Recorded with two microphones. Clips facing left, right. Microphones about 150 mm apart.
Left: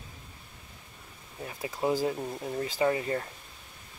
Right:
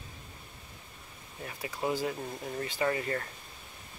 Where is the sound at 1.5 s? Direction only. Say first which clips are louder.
Left 4 dB; 25° left (ahead or behind).